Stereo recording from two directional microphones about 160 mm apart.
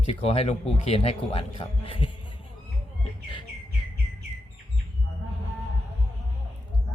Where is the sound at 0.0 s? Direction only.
35° left (ahead or behind).